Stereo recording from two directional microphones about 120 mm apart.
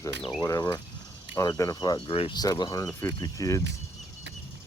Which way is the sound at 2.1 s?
50° left (ahead or behind).